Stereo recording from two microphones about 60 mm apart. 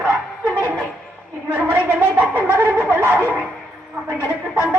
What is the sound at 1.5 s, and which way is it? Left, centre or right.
A man's voice, right.